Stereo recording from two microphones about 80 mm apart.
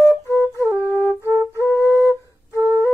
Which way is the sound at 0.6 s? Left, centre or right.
Right.